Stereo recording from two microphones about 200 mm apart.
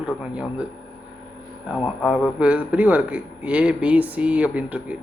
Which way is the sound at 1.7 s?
Centre (ahead or behind).